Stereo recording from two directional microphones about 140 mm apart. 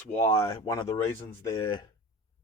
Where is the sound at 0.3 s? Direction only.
25° left (ahead or behind).